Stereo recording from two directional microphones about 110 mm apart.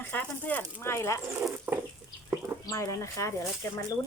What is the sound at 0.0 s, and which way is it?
Speech, 15° left (ahead or behind).